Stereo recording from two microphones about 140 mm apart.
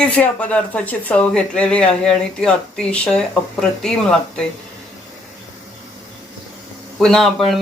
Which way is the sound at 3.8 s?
5° left (ahead or behind).